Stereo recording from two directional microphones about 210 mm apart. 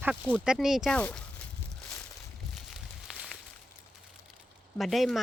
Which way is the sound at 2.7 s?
Centre (ahead or behind).